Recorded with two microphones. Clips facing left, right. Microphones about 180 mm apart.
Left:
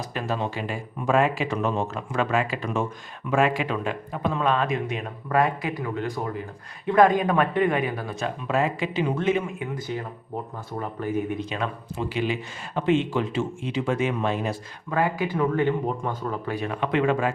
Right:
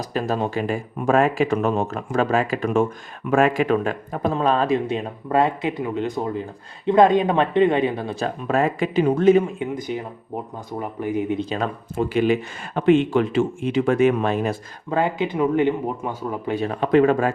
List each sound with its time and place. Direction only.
0.0 s speech: 40° right (ahead or behind)
8.4 s speech: 45° right (ahead or behind)
9.6 s speech: 20° right (ahead or behind)
11.4 s speech: 40° right (ahead or behind)
14.8 s speech: 25° right (ahead or behind)
16.5 s speech: 30° right (ahead or behind)